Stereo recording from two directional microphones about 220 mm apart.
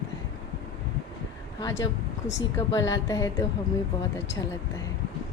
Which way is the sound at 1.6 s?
15° left (ahead or behind).